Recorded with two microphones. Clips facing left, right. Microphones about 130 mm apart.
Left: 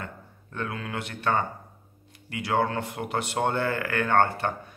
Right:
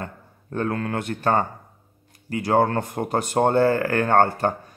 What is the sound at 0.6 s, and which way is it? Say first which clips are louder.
A man's voice: right 7 dB; 45° right (ahead or behind).